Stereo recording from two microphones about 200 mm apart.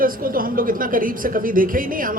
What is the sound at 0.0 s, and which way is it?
A man's voice, 45° right (ahead or behind).